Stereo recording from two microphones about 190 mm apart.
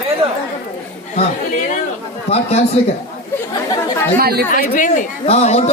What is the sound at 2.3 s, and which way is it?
Speech, 35° left (ahead or behind).